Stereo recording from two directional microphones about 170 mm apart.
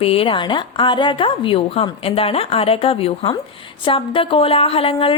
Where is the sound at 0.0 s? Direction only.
35° left (ahead or behind).